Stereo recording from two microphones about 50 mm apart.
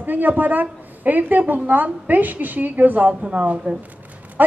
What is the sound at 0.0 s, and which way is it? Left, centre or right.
A woman's voice, right.